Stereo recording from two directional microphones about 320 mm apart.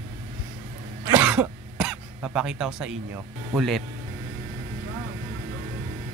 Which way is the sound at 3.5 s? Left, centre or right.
Centre.